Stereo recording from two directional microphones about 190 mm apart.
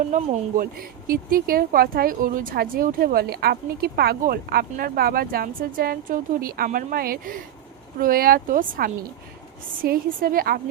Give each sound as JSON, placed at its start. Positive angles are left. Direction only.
{"t": 0.1, "sound": "speech", "side_deg": -40}